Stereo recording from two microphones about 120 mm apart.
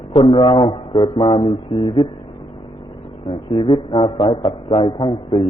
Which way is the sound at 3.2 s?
45° left (ahead or behind).